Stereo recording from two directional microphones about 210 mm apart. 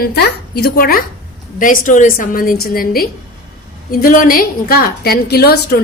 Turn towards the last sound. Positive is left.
turn(degrees=50)  # may be behind; listen again after turning